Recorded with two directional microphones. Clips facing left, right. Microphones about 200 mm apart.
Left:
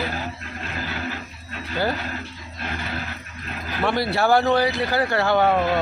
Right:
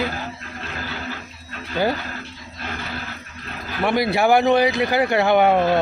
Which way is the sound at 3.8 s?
15° right (ahead or behind).